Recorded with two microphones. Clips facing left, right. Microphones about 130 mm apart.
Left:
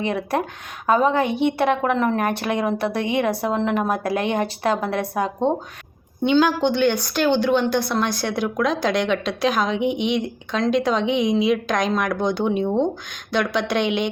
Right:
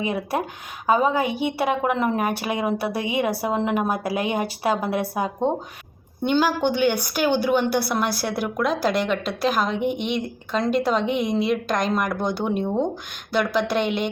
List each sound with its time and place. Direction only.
0.0 s a woman's voice: 5° right (ahead or behind)